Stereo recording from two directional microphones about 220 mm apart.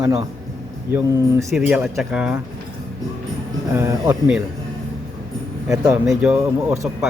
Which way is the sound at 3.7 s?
15° right (ahead or behind).